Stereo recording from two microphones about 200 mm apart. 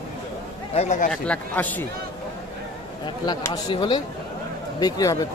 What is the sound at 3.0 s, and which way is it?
Speech, 20° left (ahead or behind).